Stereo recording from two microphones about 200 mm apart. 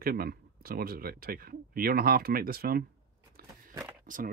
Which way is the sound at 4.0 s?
45° right (ahead or behind).